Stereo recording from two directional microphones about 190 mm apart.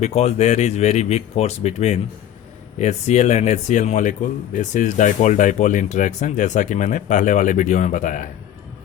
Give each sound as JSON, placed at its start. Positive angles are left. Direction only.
{"t": 0.0, "sound": "speech", "side_deg": 35}